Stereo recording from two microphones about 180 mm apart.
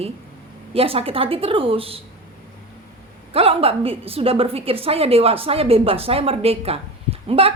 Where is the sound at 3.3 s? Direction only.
30° right (ahead or behind).